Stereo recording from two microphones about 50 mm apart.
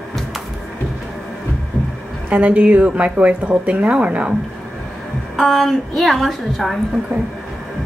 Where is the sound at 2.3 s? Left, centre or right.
Right.